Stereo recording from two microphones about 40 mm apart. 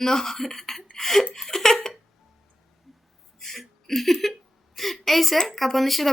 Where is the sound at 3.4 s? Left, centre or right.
Centre.